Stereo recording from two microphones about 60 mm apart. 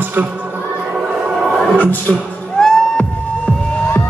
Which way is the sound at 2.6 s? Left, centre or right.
Centre.